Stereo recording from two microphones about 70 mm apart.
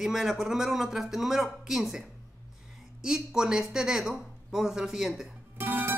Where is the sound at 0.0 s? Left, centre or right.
Centre.